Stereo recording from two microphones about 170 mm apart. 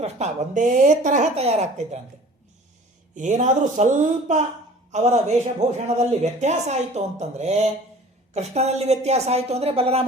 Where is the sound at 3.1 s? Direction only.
45° right (ahead or behind).